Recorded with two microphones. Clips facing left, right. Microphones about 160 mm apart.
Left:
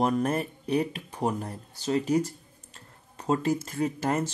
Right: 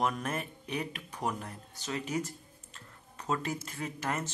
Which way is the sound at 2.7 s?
35° left (ahead or behind).